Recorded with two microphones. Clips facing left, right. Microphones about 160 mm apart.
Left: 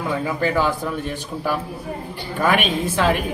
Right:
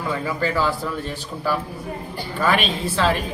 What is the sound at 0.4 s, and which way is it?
A man's voice, 15° left (ahead or behind).